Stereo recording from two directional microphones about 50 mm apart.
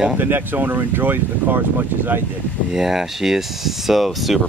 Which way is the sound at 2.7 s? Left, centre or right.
Centre.